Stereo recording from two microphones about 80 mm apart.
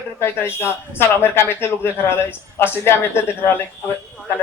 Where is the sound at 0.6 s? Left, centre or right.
Left.